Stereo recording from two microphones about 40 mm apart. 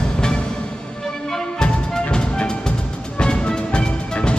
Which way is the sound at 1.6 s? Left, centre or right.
Left.